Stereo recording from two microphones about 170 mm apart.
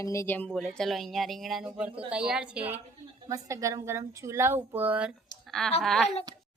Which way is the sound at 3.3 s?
20° right (ahead or behind).